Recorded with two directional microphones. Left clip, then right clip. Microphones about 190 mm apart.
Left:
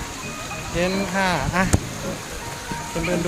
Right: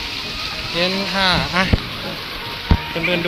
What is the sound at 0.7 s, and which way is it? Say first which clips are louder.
Speech: right 3 dB; 5° left (ahead or behind).